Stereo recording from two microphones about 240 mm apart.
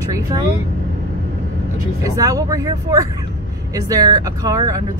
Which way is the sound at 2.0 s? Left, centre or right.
Centre.